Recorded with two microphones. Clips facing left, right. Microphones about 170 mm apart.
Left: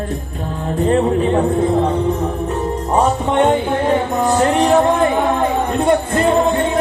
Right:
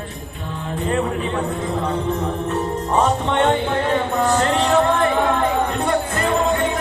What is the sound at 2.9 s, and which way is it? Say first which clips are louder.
Music: left 3 dB; 15° left (ahead or behind).